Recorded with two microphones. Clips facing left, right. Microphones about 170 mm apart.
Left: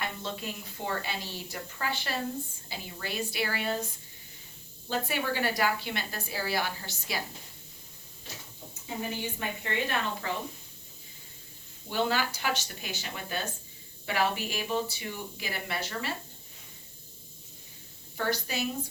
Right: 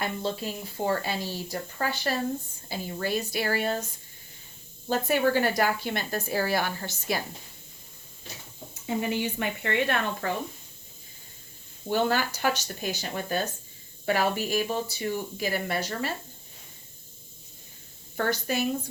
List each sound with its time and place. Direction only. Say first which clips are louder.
0.0 s a woman's voice: right 6 dB; 35° right (ahead or behind)
4.9 s a woman's voice: right 7 dB; 45° right (ahead or behind)
9.0 s speech: right 6 dB; 75° right (ahead or behind); by 10.3 s 55° right (ahead or behind)
11.9 s a woman's voice: right 4 dB; 45° right (ahead or behind)
18.2 s a woman's voice: right 4 dB; 50° right (ahead or behind)